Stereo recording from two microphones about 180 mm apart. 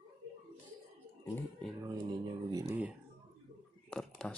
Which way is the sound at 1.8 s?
20° right (ahead or behind).